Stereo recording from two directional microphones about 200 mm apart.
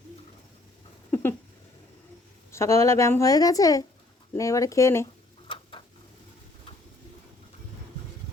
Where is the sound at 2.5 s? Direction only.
15° left (ahead or behind).